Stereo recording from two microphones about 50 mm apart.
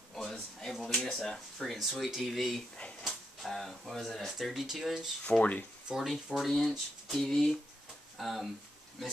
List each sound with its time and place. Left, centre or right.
0.1 s a sound: centre
0.7 s speech: centre
1.8 s speech: centre
5.4 s speech: left
5.9 s speech: centre
7.1 s a sound: centre
8.2 s speech: centre